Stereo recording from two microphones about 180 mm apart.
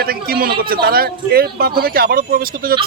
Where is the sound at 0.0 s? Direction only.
55° right (ahead or behind).